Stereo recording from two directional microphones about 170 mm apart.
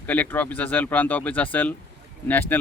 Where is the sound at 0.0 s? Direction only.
10° left (ahead or behind).